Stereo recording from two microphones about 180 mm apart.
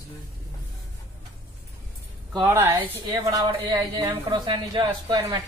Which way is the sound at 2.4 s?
15° right (ahead or behind).